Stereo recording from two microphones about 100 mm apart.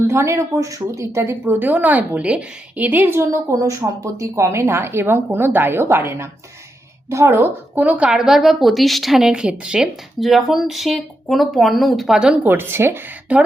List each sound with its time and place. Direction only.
0.0 s a woman's voice: 30° right (ahead or behind)